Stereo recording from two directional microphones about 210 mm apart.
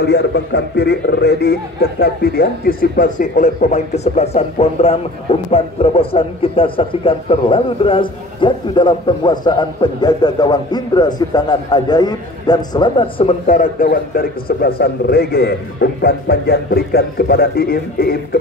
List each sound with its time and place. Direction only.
0.0 s a man's voice: 55° left (ahead or behind)